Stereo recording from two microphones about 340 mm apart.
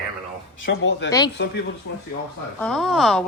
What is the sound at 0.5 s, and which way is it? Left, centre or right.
Speech, left.